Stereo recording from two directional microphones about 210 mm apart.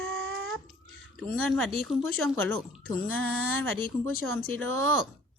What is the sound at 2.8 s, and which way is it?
Speech, 65° right (ahead or behind).